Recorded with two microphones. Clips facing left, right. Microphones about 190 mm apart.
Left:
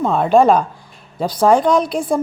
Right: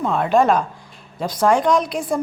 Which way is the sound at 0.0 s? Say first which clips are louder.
Left 4 dB; 35° left (ahead or behind).